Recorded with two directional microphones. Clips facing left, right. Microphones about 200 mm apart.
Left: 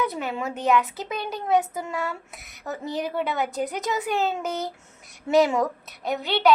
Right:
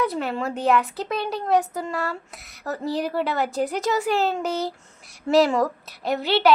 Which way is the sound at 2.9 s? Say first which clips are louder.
Right 2 dB; centre (ahead or behind).